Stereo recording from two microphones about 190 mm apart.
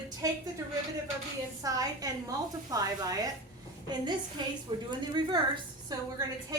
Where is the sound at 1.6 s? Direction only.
20° right (ahead or behind).